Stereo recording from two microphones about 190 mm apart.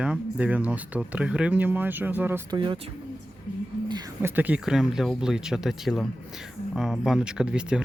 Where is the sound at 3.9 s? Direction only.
20° right (ahead or behind).